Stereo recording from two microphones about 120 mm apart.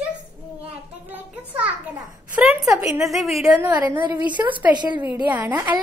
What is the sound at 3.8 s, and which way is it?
Speech, 15° right (ahead or behind).